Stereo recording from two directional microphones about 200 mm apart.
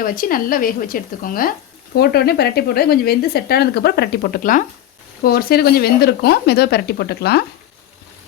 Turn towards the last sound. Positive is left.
turn(degrees=55)  # may be behind; listen again after turning